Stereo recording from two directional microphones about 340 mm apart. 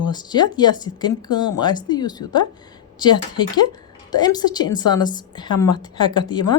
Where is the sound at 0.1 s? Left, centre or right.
Centre.